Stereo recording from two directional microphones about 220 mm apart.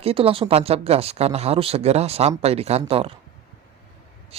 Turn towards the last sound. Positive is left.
turn(degrees=-25)  # may be behind; listen again after turning